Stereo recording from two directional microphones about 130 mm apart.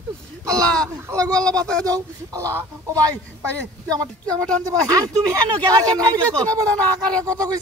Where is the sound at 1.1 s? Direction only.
30° right (ahead or behind).